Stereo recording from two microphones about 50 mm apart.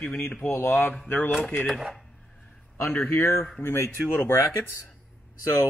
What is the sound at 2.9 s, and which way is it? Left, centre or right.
Speech, left.